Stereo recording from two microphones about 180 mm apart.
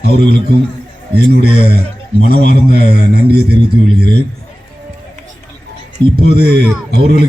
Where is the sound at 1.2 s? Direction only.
60° right (ahead or behind).